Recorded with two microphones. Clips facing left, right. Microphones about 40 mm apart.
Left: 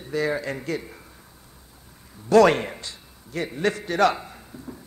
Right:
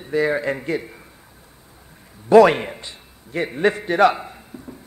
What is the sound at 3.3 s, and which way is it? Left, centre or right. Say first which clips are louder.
A man's voice: right 5 dB; right.